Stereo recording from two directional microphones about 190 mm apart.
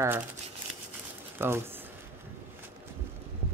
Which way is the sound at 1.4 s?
10° right (ahead or behind).